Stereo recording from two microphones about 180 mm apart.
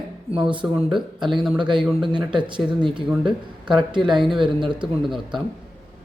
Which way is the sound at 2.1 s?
25° right (ahead or behind).